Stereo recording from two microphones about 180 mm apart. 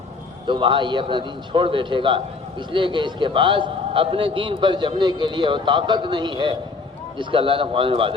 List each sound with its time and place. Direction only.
0.4 s a man's voice: 25° right (ahead or behind)